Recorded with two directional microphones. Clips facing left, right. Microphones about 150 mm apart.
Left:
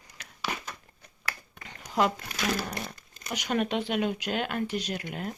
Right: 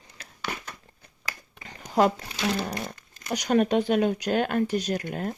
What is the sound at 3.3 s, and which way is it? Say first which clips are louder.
Speech: right 6 dB; 40° right (ahead or behind).